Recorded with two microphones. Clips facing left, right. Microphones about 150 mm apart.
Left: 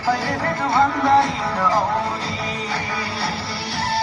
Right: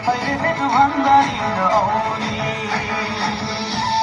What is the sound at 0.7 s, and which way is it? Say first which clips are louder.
Music: right 2 dB; 25° right (ahead or behind).